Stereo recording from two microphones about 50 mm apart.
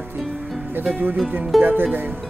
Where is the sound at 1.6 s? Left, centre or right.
Right.